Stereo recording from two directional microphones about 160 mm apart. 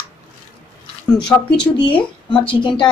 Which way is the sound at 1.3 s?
20° left (ahead or behind).